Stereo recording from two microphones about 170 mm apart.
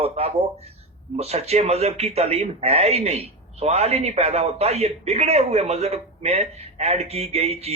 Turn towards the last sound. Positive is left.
turn(degrees=-40)  # may be behind; listen again after turning